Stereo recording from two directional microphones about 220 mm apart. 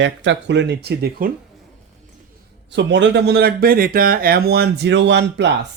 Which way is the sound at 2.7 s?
55° right (ahead or behind).